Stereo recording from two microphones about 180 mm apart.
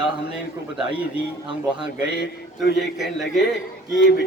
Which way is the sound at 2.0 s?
70° left (ahead or behind).